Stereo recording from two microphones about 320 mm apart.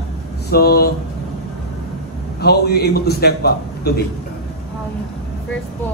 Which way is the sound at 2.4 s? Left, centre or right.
Left.